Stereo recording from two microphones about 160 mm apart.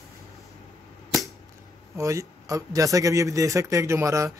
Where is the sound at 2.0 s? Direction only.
20° right (ahead or behind).